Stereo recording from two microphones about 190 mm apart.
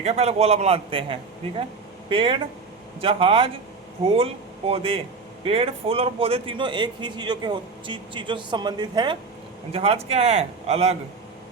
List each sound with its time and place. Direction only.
0.0 s a man's voice: 35° right (ahead or behind)